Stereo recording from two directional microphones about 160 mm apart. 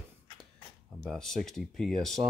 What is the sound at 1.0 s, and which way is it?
Speech, centre (ahead or behind).